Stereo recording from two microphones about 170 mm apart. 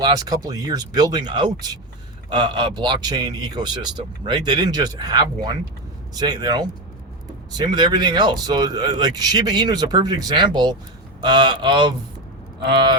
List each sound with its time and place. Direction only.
0.0 s speech: 20° right (ahead or behind)